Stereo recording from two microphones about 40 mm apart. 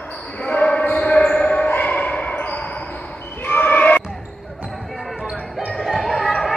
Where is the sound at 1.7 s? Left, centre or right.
Left.